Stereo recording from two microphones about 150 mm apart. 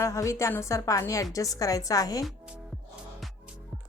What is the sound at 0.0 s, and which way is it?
A woman's voice, 20° left (ahead or behind).